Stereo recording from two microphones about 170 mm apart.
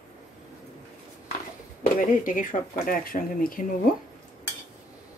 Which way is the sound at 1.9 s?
50° left (ahead or behind).